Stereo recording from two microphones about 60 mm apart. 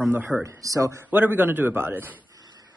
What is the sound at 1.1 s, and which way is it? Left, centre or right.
A man's voice, right.